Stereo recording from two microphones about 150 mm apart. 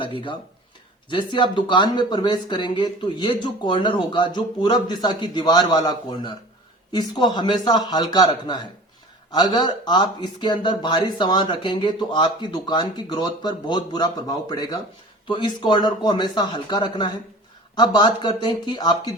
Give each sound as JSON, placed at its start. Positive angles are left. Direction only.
{"t": 1.1, "sound": "speech", "side_deg": 30}